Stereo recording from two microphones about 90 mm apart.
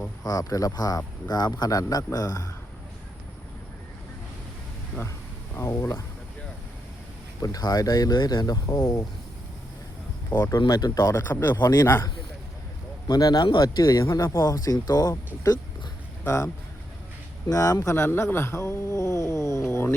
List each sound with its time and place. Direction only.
0.3 s speech: 40° left (ahead or behind)
5.5 s speech: 35° left (ahead or behind)
7.4 s speech: 45° left (ahead or behind)
10.7 s speech: 45° left (ahead or behind)
11.1 s a man's voice: 30° left (ahead or behind)
13.1 s speech: 45° left (ahead or behind)
16.2 s speech: 35° left (ahead or behind)
17.5 s speech: 40° left (ahead or behind)